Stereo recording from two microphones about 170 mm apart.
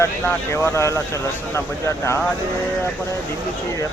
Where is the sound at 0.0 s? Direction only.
15° left (ahead or behind).